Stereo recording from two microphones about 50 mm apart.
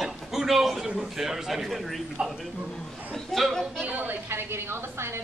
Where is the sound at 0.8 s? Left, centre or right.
Centre.